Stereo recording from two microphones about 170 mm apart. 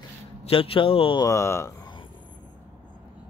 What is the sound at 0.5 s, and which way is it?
Speech, 30° left (ahead or behind).